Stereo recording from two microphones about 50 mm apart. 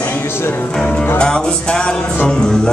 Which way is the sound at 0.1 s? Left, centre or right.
Left.